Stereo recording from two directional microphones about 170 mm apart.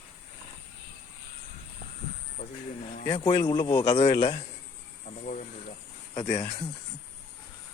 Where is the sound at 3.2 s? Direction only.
25° left (ahead or behind).